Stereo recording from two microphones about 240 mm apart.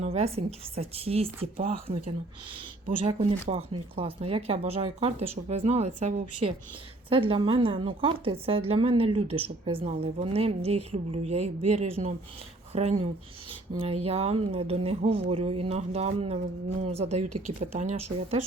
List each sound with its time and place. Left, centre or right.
0.0 s speech: right
2.8 s speech: right
17.2 s speech: right
17.6 s speech: right